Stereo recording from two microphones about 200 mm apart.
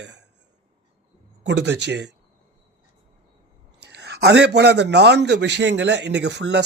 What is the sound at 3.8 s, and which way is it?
A man's voice, 55° right (ahead or behind).